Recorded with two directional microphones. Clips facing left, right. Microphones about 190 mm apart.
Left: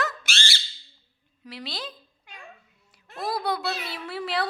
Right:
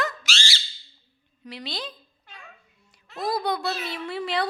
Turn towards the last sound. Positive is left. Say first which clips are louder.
# right 2 dB
turn(degrees=5)  # may be behind; listen again after turning